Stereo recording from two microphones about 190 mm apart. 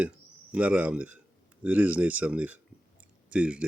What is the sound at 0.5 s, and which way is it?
Speech, 5° right (ahead or behind).